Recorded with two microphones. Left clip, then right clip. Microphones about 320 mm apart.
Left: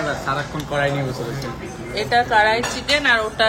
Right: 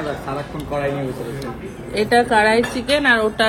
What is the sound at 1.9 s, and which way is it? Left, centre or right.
Speech, right.